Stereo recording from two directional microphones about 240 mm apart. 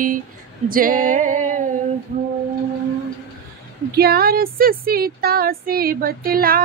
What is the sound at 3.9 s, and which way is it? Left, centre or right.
Speech, right.